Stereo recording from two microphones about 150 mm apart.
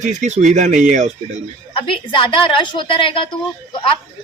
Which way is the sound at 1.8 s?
35° left (ahead or behind).